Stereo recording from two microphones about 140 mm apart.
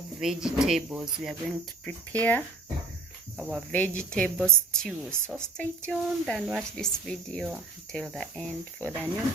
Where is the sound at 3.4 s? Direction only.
5° right (ahead or behind).